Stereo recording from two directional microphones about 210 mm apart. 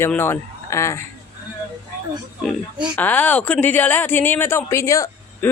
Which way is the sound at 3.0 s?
10° left (ahead or behind).